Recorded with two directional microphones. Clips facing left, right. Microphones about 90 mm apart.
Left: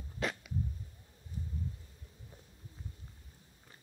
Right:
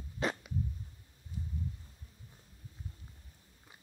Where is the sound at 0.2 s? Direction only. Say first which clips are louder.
Right 2 dB; 35° right (ahead or behind).